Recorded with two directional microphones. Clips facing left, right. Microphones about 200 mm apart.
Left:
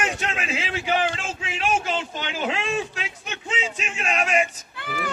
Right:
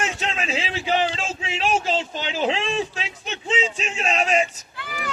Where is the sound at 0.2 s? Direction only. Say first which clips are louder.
Right 2 dB; 30° right (ahead or behind).